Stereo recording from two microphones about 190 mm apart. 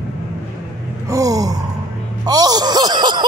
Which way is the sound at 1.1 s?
20° right (ahead or behind).